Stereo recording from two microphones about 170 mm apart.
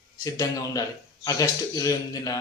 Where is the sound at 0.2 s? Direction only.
20° left (ahead or behind).